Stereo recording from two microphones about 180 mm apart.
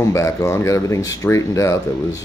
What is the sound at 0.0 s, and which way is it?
Speech, 15° left (ahead or behind).